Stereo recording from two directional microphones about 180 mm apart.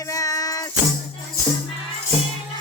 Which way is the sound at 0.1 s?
20° left (ahead or behind).